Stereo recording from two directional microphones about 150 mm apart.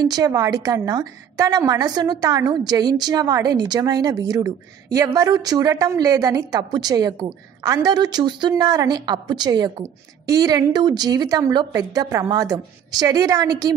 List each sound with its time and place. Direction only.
0.0 s a woman's voice: 25° right (ahead or behind)